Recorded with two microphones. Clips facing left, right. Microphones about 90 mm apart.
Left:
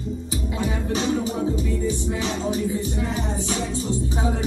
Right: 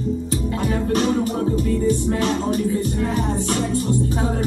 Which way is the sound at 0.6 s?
50° right (ahead or behind).